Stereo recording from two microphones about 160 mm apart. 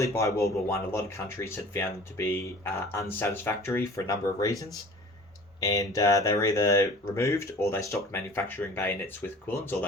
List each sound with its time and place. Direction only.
0.0 s speech: 20° left (ahead or behind)
5.5 s speech: 20° left (ahead or behind)